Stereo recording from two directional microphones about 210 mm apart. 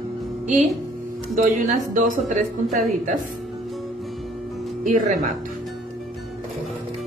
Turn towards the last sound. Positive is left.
turn(degrees=-40)  # may be behind; listen again after turning